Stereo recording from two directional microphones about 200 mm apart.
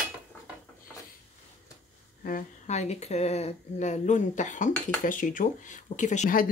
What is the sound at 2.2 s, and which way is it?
Speech, 40° left (ahead or behind).